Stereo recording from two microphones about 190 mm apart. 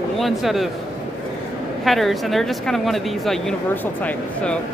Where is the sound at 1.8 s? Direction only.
Centre (ahead or behind).